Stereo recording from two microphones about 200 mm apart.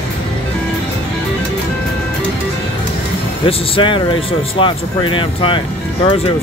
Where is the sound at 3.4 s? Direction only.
25° left (ahead or behind).